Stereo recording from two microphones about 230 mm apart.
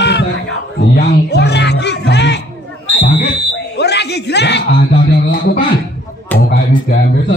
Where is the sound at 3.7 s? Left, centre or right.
Left.